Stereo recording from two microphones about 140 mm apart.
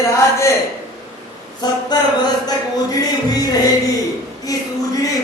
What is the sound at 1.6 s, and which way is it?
Music, 30° left (ahead or behind).